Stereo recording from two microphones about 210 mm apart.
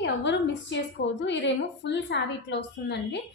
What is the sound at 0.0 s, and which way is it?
A woman's voice, 55° left (ahead or behind).